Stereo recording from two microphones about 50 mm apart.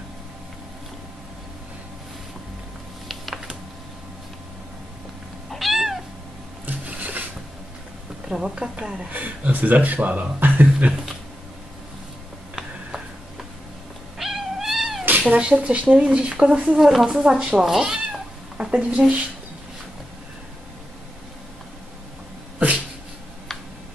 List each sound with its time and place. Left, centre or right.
5.5 s cat: centre
6.6 s printer: right
8.3 s a woman's voice: centre
9.1 s speech: right
12.5 s a sound: centre
14.1 s cat: centre
15.0 s cat: right
15.3 s speech: right
16.8 s a woman's voice: centre
17.1 s a woman's voice: centre
17.6 s cat: centre